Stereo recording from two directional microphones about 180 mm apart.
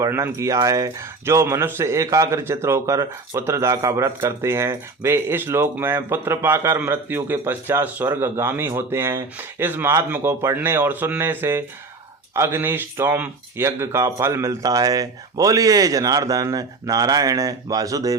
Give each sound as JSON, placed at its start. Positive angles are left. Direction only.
{"t": 0.0, "sound": "speech", "side_deg": -15}